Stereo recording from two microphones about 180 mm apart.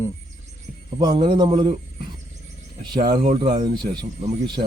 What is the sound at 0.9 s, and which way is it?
Speech, 25° right (ahead or behind).